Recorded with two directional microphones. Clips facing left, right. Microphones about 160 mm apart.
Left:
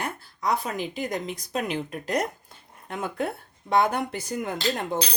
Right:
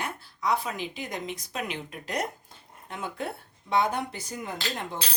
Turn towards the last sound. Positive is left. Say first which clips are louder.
# left 8 dB
turn(degrees=45)  # may be behind; listen again after turning